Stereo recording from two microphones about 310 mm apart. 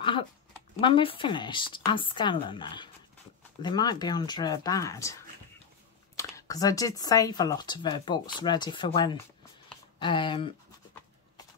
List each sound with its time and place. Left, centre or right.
0.7 s speech: centre
6.1 s speech: centre